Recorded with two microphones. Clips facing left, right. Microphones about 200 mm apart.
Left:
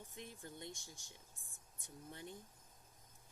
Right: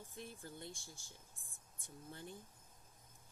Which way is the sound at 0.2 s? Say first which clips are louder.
Right 1 dB; 20° left (ahead or behind).